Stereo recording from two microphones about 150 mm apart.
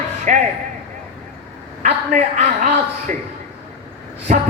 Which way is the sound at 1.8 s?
45° right (ahead or behind).